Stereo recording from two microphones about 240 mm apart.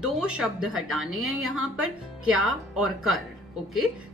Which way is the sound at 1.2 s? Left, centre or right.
Right.